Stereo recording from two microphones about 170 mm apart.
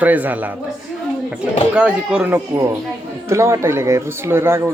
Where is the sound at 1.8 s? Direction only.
5° right (ahead or behind).